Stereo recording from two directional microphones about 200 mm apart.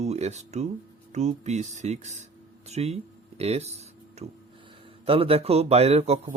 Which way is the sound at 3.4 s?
30° right (ahead or behind).